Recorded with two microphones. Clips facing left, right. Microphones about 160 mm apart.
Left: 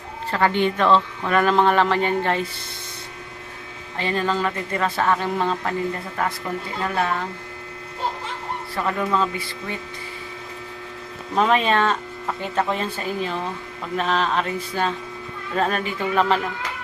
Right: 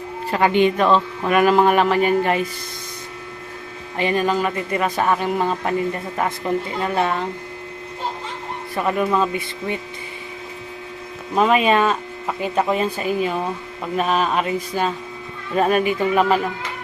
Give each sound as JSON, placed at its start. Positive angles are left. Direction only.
{"t": 0.3, "sound": "speech", "side_deg": -15}
{"t": 3.9, "sound": "speech", "side_deg": -15}
{"t": 8.7, "sound": "speech", "side_deg": -15}
{"t": 11.3, "sound": "speech", "side_deg": -10}